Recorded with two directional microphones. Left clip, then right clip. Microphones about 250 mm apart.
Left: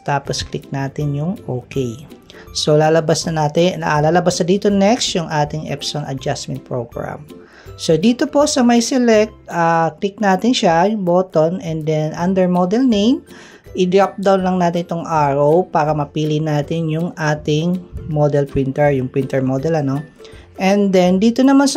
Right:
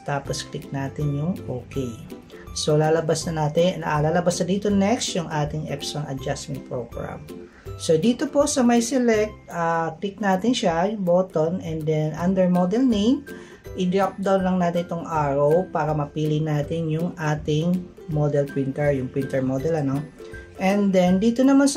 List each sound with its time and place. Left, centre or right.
0.0 s speech: left